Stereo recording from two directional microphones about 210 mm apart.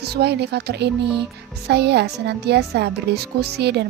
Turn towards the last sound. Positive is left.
turn(degrees=-50)  # may be behind; listen again after turning